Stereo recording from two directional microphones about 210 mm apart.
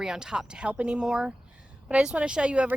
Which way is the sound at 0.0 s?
5° right (ahead or behind).